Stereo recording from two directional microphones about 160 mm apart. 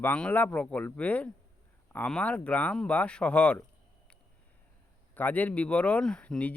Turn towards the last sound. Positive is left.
turn(degrees=5)  # may be behind; listen again after turning